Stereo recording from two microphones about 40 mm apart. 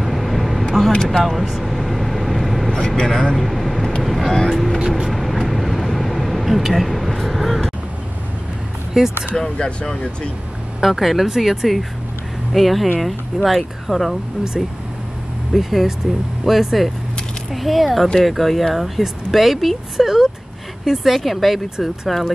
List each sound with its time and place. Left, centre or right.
0.0 s vehicle: centre
0.9 s speech: centre
1.4 s vehicle: centre
3.0 s speech: left
3.3 s vehicle: centre
4.0 s speech: centre
4.7 s speech: centre
5.1 s vehicle: centre
9.0 s speech: centre
10.8 s speech: centre
15.5 s speech: centre